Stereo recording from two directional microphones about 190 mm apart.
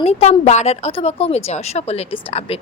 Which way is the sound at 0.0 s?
35° left (ahead or behind).